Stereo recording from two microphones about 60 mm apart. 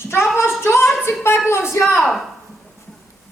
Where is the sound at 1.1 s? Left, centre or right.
Left.